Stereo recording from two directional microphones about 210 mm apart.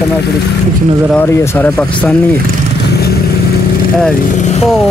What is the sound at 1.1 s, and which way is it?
Speech, 10° left (ahead or behind).